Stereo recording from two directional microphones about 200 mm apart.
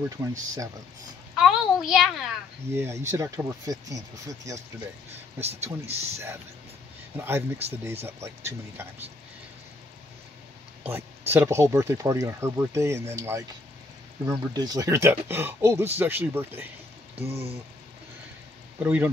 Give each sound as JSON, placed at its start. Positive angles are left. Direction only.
{"t": 0.2, "sound": "speech", "side_deg": -15}
{"t": 1.3, "sound": "a sound", "side_deg": 0}
{"t": 2.7, "sound": "speech", "side_deg": -15}
{"t": 5.4, "sound": "speech", "side_deg": -30}
{"t": 7.2, "sound": "speech", "side_deg": -10}
{"t": 10.8, "sound": "speech", "side_deg": -10}
{"t": 17.1, "sound": "speech", "side_deg": -30}
{"t": 18.8, "sound": "speech", "side_deg": -10}